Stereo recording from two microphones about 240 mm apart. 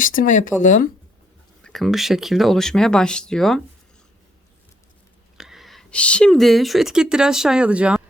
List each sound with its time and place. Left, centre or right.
0.0 s speech: left
1.6 s speech: centre
5.4 s speech: centre